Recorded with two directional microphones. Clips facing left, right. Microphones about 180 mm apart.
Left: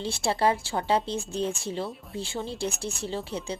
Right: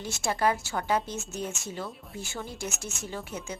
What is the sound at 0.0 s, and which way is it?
Speech, 30° left (ahead or behind).